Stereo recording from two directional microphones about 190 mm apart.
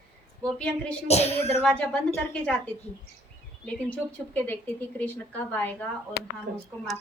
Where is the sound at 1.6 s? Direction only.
5° left (ahead or behind).